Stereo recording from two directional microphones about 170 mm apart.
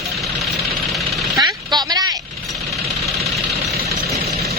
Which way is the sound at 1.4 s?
25° right (ahead or behind).